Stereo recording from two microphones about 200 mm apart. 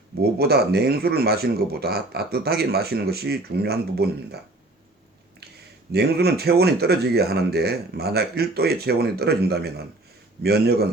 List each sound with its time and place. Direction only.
0.2 s speech: 50° right (ahead or behind)
5.9 s speech: 55° right (ahead or behind)